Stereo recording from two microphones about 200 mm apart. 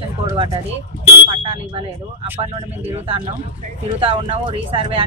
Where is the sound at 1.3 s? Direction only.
25° right (ahead or behind).